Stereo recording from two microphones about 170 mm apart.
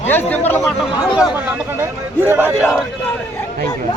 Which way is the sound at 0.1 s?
10° left (ahead or behind).